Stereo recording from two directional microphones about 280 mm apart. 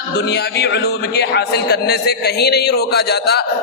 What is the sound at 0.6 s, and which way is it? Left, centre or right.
A man's voice, left.